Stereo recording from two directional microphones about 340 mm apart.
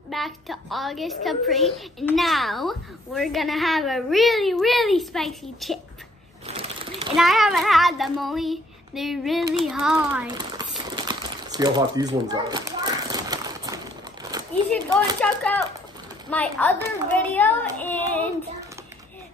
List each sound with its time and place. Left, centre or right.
0.1 s a woman's voice: centre
6.4 s sewing machine: centre
7.2 s a woman's voice: centre
10.2 s speech: centre
10.7 s crumpling: centre
14.3 s a sound: centre
15.1 s a woman's voice: centre